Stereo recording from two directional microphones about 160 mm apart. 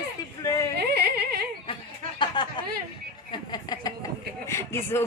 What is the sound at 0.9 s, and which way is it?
Music, 75° right (ahead or behind).